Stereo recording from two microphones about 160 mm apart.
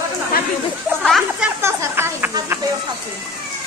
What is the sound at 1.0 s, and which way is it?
Speech, 5° right (ahead or behind).